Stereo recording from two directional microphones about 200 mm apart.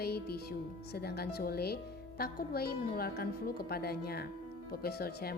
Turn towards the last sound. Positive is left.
turn(degrees=50)  # may be behind; listen again after turning